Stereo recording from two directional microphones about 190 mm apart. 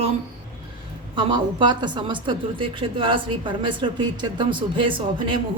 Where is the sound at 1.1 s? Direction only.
25° right (ahead or behind).